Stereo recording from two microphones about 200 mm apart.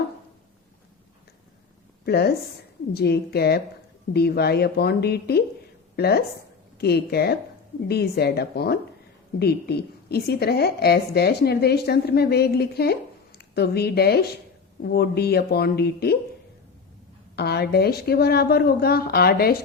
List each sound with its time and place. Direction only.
2.0 s a woman's voice: 55° left (ahead or behind)
17.3 s a woman's voice: 55° left (ahead or behind)